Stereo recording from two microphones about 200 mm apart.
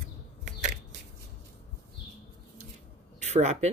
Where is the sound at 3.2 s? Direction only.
35° right (ahead or behind).